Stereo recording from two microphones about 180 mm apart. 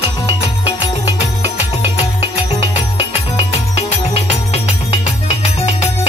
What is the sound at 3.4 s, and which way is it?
Music, 35° left (ahead or behind).